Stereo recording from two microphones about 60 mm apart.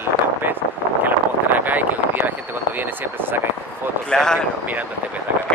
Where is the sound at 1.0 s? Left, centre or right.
Right.